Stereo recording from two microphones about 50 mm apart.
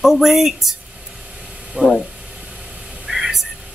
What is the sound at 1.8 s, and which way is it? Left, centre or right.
Speech, right.